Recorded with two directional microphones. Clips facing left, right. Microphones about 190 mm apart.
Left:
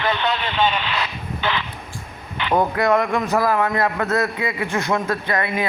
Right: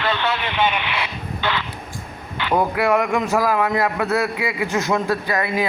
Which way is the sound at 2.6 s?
10° right (ahead or behind).